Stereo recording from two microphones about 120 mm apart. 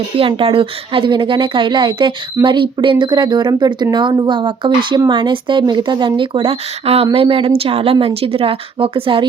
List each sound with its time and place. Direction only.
0.2 s speech: 50° right (ahead or behind)